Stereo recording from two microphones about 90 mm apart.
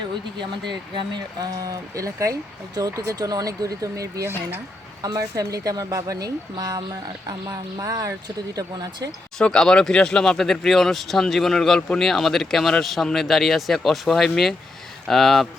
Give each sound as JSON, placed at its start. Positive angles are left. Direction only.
{"t": 0.3, "sound": "speech", "side_deg": -60}
{"t": 9.4, "sound": "speech", "side_deg": 10}